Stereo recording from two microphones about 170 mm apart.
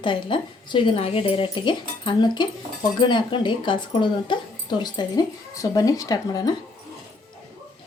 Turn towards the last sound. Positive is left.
turn(degrees=20)  # may be behind; listen again after turning